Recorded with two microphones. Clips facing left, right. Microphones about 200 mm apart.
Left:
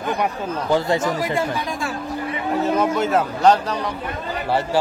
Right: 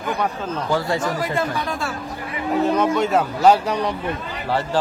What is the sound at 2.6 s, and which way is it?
A man's voice, 5° left (ahead or behind).